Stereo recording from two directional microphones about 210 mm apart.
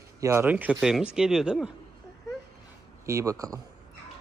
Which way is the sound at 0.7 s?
Centre (ahead or behind).